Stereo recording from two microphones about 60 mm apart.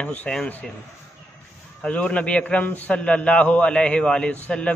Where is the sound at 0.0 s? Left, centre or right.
Left.